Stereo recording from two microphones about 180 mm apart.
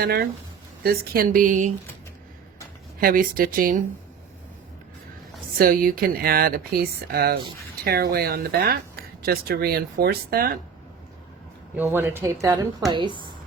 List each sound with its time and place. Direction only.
0.0 s a woman's voice: 60° right (ahead or behind)
3.0 s a woman's voice: 50° right (ahead or behind)
5.5 s speech: 50° right (ahead or behind)
11.8 s a woman's voice: 10° right (ahead or behind)